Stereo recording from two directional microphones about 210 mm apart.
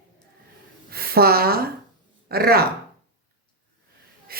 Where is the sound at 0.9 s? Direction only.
45° right (ahead or behind).